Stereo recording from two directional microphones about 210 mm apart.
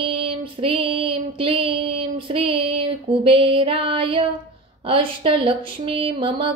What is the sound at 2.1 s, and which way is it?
Female singing, 25° right (ahead or behind).